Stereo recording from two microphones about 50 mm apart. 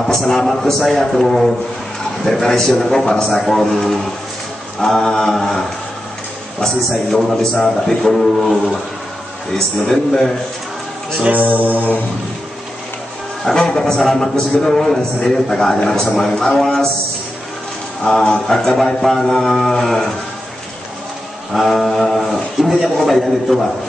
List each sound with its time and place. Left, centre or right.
0.0 s a man's voice: centre
3.4 s a man's voice: centre
6.9 s a man's voice: centre
11.2 s music: right
13.5 s a man's voice: centre
18.0 s a man's voice: centre
21.5 s a man's voice: centre